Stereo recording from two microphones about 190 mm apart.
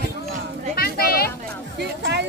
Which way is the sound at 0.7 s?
55° left (ahead or behind).